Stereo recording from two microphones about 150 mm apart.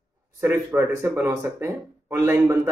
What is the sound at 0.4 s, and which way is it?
A man's voice, 15° right (ahead or behind).